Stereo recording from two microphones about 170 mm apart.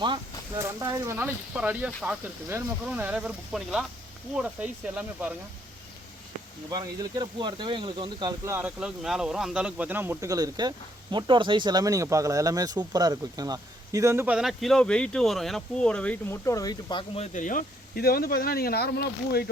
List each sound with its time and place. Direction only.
0.6 s speech: 15° right (ahead or behind)
6.7 s speech: 20° right (ahead or behind); by 16.4 s 5° left (ahead or behind)
16.5 s speech: 20° left (ahead or behind)
17.3 s speech: 50° left (ahead or behind); by 19.5 s 70° left (ahead or behind)